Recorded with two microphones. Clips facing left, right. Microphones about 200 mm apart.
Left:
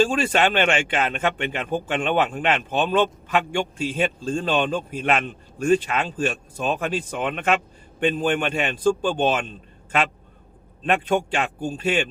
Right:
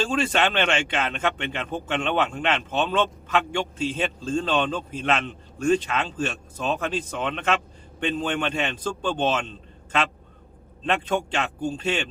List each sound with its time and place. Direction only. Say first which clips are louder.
0.5 s a man's voice: left 3 dB; 10° left (ahead or behind)
10.8 s a man's voice: left 3 dB; 10° left (ahead or behind)